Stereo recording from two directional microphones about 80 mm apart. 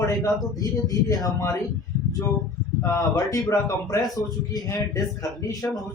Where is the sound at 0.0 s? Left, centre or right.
Left.